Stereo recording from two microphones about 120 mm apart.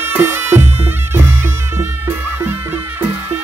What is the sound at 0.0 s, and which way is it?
Music, 20° right (ahead or behind).